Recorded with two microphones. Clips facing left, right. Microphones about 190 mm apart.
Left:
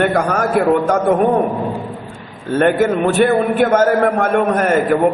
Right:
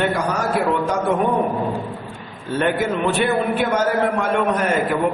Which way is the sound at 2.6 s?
50° left (ahead or behind).